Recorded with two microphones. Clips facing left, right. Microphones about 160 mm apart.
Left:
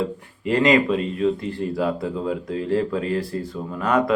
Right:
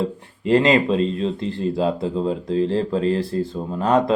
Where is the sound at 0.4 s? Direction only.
30° right (ahead or behind).